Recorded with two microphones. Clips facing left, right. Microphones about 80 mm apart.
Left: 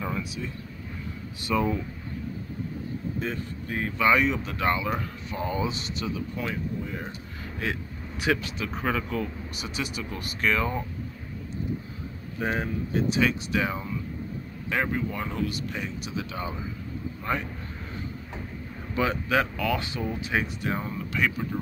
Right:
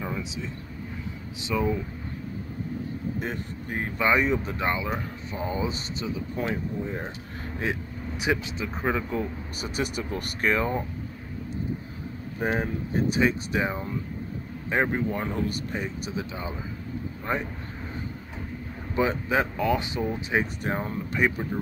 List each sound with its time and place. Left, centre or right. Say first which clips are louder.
0.0 s vehicle: left 1 dB; centre
1.5 s speech: left 1 dB; centre
3.3 s speech: even; right
4.6 s speech: left 1 dB; right
8.2 s speech: left 1 dB; centre
9.6 s speech: right 4 dB; right
12.4 s speech: right 1 dB; right
17.3 s speech: right 1 dB; right
18.9 s speech: right 1 dB; right
20.6 s speech: right 1 dB; right